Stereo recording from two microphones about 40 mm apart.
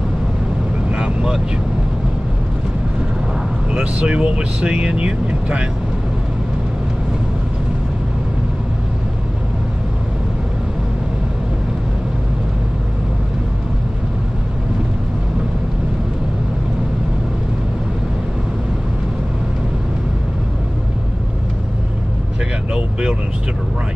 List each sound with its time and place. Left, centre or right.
0.8 s vehicle: right
3.7 s speech: right